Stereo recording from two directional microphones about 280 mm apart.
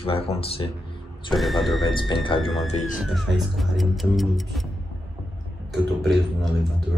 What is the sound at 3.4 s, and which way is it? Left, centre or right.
Speech, centre.